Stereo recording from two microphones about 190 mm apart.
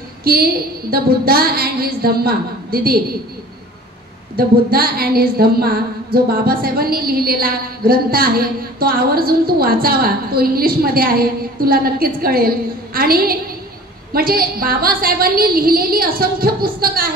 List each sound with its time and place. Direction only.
0.2 s a woman's voice: 55° right (ahead or behind)
4.4 s a woman's voice: 50° right (ahead or behind)